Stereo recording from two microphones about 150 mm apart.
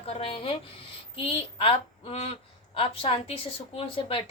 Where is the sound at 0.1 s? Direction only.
35° left (ahead or behind).